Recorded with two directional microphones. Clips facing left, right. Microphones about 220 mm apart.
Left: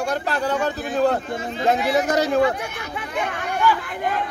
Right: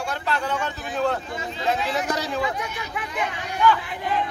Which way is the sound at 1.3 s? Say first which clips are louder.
Left 5 dB; 55° left (ahead or behind).